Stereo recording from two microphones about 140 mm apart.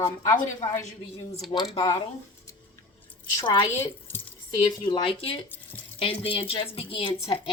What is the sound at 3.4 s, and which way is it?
Speech, 35° left (ahead or behind).